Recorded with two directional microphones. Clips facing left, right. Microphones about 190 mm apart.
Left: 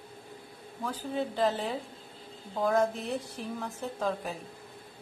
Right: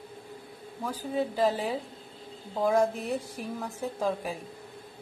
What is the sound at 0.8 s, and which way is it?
Speech, 10° right (ahead or behind).